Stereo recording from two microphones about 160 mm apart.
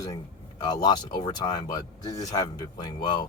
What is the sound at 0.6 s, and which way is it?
Speech, 25° left (ahead or behind).